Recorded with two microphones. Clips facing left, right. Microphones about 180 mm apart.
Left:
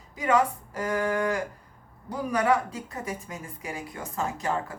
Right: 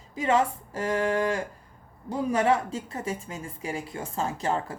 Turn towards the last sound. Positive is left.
turn(degrees=-30)  # may be behind; listen again after turning